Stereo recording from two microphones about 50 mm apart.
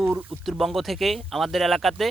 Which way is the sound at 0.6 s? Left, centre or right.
Centre.